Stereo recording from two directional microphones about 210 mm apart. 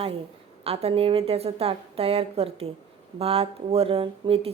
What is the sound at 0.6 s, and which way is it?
Speech, 30° right (ahead or behind).